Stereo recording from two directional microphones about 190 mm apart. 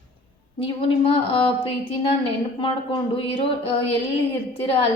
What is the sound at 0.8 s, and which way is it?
Speech, 30° left (ahead or behind).